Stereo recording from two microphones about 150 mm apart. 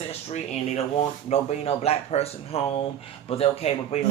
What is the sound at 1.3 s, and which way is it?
Speech, 45° left (ahead or behind).